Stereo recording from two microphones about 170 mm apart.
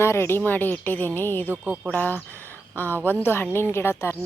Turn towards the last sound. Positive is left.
turn(degrees=15)  # may be behind; listen again after turning